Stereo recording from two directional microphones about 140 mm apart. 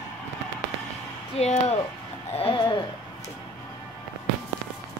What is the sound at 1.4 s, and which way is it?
Speech, 50° left (ahead or behind).